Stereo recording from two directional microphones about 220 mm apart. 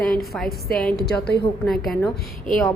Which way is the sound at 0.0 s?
Centre (ahead or behind).